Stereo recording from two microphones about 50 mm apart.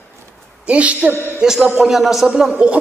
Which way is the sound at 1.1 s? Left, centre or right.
Left.